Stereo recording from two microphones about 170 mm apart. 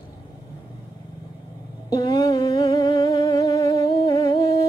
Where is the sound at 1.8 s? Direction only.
25° left (ahead or behind).